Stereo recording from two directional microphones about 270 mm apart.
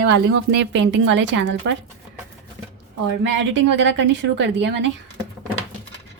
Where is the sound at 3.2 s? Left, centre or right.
Right.